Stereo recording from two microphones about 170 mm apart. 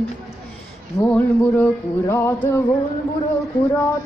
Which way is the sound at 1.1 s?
10° left (ahead or behind).